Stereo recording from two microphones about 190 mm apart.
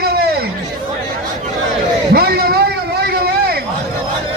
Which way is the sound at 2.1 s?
55° right (ahead or behind).